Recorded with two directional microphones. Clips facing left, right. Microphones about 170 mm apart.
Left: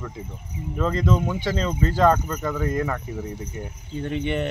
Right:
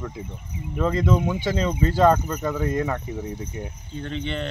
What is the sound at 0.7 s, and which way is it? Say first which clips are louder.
Speech: right 1 dB; 10° right (ahead or behind).